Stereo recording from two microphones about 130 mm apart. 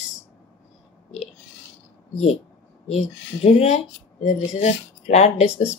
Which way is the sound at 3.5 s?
60° left (ahead or behind).